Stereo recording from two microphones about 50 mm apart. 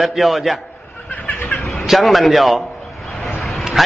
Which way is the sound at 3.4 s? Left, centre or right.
Centre.